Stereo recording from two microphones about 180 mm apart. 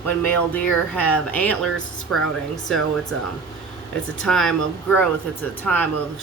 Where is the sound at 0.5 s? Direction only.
10° left (ahead or behind).